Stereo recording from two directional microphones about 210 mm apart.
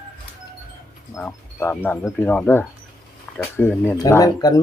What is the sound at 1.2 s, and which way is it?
Speech, 10° left (ahead or behind).